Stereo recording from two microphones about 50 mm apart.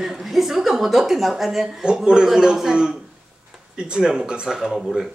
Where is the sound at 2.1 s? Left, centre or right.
Centre.